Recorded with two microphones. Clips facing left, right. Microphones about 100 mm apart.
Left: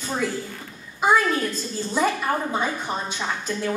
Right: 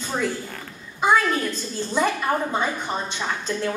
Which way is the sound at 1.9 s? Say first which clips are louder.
Right 1 dB; 5° left (ahead or behind).